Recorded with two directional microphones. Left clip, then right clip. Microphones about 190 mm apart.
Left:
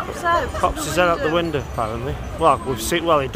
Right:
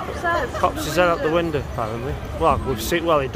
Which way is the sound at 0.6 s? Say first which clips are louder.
Even; 10° left (ahead or behind).